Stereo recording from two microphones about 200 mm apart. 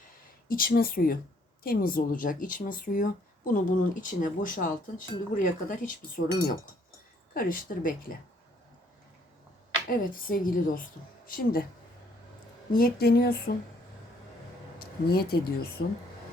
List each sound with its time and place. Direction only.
0.4 s a woman's voice: 45° left (ahead or behind)
7.3 s a woman's voice: 45° left (ahead or behind)
10.0 s a woman's voice: 45° left (ahead or behind)
12.7 s a woman's voice: 50° left (ahead or behind)
14.8 s speech: 50° left (ahead or behind)